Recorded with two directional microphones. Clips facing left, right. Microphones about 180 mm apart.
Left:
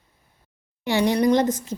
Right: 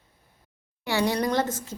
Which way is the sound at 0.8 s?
15° left (ahead or behind).